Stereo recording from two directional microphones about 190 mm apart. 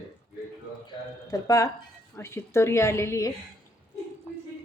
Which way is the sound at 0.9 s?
20° left (ahead or behind).